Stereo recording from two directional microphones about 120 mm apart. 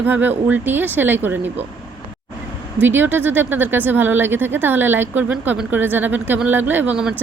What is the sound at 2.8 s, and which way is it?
Speech, 15° right (ahead or behind).